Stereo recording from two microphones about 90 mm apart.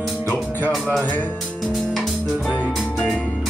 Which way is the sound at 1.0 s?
20° left (ahead or behind).